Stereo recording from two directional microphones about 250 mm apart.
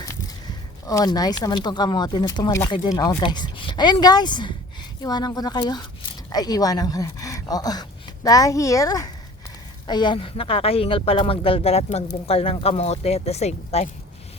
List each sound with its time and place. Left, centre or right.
0.9 s speech: centre